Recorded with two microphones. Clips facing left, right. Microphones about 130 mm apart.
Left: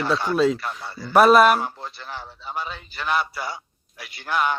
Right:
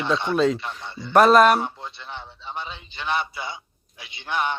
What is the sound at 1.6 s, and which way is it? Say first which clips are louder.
Speech: left 1 dB; 40° left (ahead or behind).